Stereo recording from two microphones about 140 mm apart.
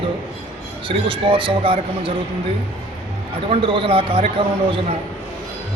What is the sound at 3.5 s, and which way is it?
A man's voice, 40° right (ahead or behind).